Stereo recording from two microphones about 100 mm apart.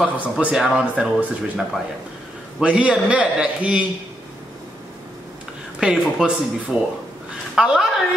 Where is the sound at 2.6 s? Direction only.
10° right (ahead or behind).